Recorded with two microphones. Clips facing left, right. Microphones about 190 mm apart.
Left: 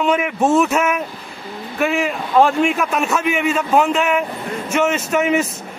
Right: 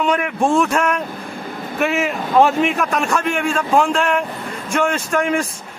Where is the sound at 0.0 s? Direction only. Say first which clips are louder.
Left 1 dB; 5° left (ahead or behind).